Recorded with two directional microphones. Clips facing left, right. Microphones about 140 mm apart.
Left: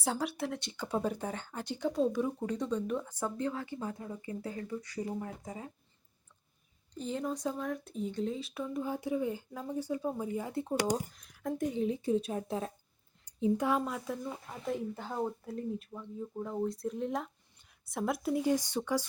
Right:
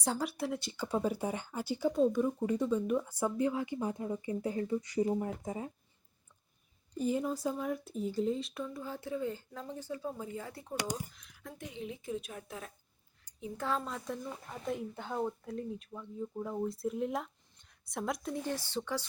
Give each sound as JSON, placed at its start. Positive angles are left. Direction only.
{"t": 0.0, "sound": "speech", "side_deg": 0}
{"t": 6.9, "sound": "speech", "side_deg": -10}
{"t": 8.6, "sound": "speech", "side_deg": 15}
{"t": 11.1, "sound": "a woman's voice", "side_deg": 45}
{"t": 13.6, "sound": "speech", "side_deg": 15}